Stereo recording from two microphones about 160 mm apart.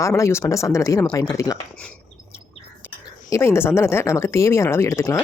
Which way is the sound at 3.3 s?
15° left (ahead or behind).